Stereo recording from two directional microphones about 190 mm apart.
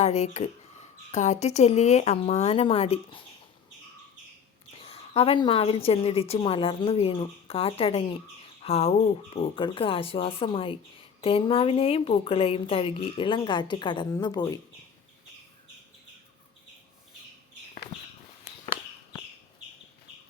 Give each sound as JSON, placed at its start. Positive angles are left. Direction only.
{"t": 0.0, "sound": "speech", "side_deg": 35}
{"t": 4.8, "sound": "speech", "side_deg": 30}